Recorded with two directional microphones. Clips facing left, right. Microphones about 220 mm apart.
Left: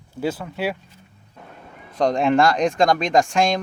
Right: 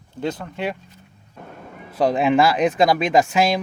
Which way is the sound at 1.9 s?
5° right (ahead or behind).